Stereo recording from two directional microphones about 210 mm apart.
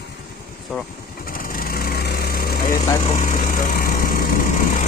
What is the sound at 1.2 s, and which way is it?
Engine, 45° left (ahead or behind).